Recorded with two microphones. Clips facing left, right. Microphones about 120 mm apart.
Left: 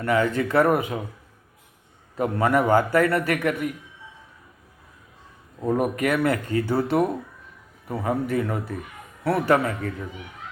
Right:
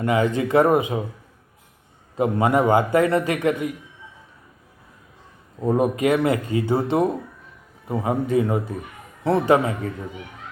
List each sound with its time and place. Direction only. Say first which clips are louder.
0.0 s a man's voice: right 1 dB; 20° right (ahead or behind)
2.1 s a man's voice: right 2 dB; 20° right (ahead or behind)
5.6 s a man's voice: right 3 dB; 20° right (ahead or behind)